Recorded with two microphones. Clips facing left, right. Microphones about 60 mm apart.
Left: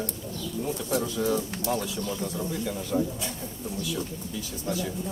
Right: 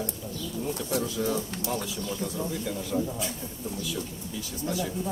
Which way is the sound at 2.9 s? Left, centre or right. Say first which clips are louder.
Left 2 dB; centre.